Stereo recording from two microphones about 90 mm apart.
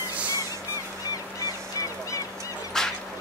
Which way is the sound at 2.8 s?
5° left (ahead or behind).